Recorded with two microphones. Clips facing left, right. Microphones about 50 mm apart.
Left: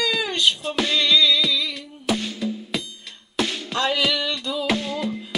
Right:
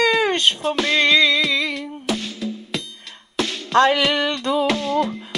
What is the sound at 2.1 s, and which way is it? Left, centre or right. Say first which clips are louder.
Drum: left 2 dB; centre.